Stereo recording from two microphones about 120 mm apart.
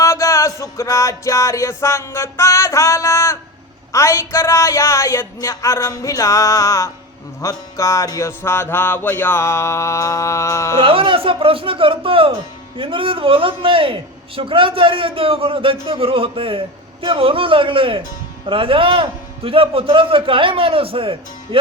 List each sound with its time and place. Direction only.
0.0 s music: 25° left (ahead or behind)
10.8 s speech: 50° right (ahead or behind)